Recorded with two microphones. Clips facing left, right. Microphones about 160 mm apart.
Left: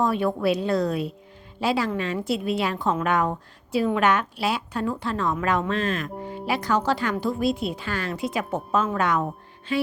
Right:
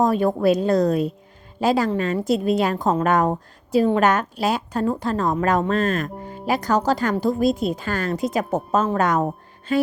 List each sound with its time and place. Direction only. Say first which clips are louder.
0.0 s a woman's voice: right 4 dB; 40° right (ahead or behind)